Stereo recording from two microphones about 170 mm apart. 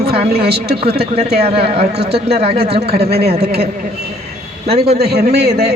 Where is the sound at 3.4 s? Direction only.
70° right (ahead or behind).